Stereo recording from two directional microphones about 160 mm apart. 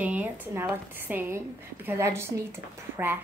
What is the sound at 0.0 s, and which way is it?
A woman's voice, 10° right (ahead or behind).